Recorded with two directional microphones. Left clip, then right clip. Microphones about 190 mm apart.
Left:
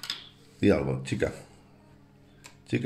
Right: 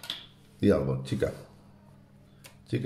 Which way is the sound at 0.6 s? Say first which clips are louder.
Left 1 dB; centre (ahead or behind).